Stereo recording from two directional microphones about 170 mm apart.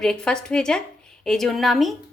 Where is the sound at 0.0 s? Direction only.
5° left (ahead or behind).